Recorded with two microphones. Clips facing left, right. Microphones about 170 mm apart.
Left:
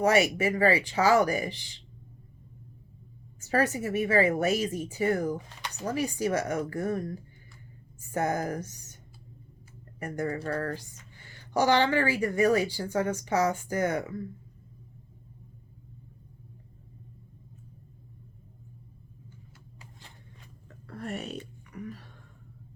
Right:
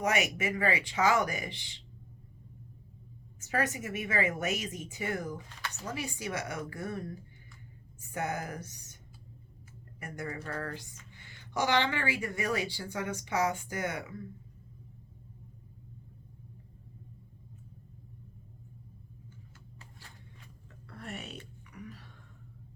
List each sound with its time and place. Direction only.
0.0 s speech: 35° left (ahead or behind)
3.4 s speech: 35° left (ahead or behind)
10.0 s speech: 40° left (ahead or behind)
20.8 s whispering: 40° left (ahead or behind)